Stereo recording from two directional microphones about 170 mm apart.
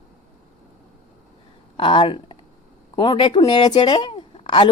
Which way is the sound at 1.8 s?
30° left (ahead or behind).